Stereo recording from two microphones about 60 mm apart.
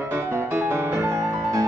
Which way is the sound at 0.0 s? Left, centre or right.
Right.